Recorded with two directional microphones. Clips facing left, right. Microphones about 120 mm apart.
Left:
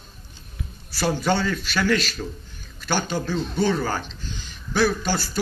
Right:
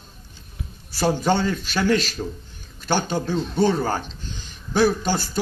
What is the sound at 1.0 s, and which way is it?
Speech, 20° right (ahead or behind).